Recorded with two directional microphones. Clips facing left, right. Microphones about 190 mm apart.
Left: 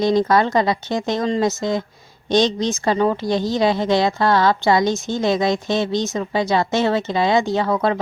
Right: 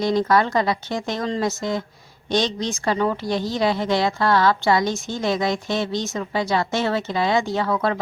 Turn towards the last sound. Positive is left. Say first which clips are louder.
# left 3 dB
turn(degrees=20)  # may be behind; listen again after turning